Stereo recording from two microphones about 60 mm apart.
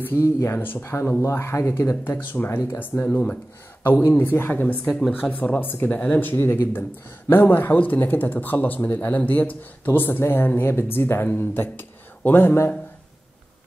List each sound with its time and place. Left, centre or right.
0.0 s speech: left
0.6 s speech: left
0.8 s speech: left
3.0 s speech: left
5.9 s speech: left
6.2 s speech: left